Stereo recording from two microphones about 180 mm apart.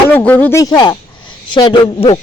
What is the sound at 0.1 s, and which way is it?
Speech, 10° left (ahead or behind).